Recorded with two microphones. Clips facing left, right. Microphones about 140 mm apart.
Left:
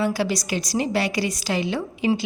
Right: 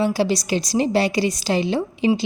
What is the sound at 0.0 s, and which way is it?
A woman's voice, 30° right (ahead or behind).